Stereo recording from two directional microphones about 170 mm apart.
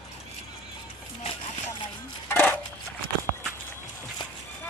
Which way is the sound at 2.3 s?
10° left (ahead or behind).